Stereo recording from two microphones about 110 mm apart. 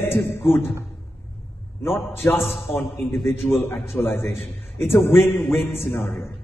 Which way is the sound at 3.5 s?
20° left (ahead or behind).